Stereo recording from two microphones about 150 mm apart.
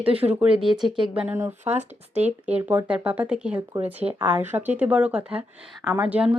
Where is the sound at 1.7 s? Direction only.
45° right (ahead or behind).